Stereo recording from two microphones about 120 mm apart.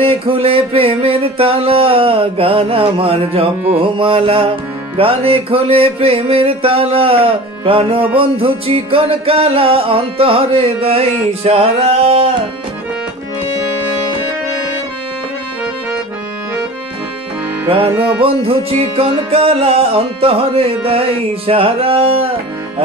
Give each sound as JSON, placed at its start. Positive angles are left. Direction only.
{"t": 0.0, "sound": "music", "side_deg": -50}
{"t": 17.6, "sound": "music", "side_deg": -50}